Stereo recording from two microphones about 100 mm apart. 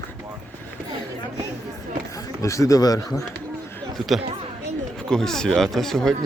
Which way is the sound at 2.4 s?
30° left (ahead or behind).